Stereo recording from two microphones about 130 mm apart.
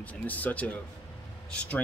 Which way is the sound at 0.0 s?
10° left (ahead or behind).